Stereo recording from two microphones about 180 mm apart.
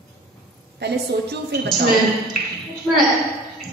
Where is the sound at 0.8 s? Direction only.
70° right (ahead or behind).